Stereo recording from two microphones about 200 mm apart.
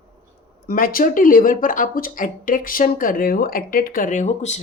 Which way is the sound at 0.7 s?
45° left (ahead or behind).